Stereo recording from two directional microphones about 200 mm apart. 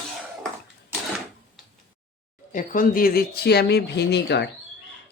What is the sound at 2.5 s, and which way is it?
Speech, 40° left (ahead or behind).